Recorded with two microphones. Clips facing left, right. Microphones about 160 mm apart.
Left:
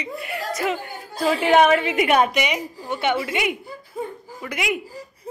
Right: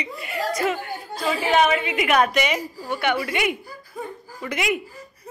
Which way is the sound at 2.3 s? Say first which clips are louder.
Right 1 dB; 15° left (ahead or behind).